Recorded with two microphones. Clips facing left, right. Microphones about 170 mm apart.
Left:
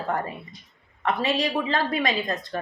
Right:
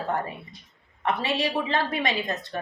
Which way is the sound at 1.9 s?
20° right (ahead or behind).